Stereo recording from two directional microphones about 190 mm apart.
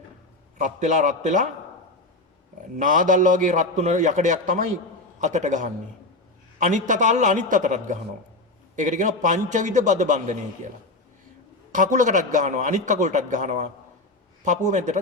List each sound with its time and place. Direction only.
0.6 s a man's voice: 40° right (ahead or behind)
2.7 s a man's voice: 45° right (ahead or behind)
11.7 s a man's voice: 40° right (ahead or behind)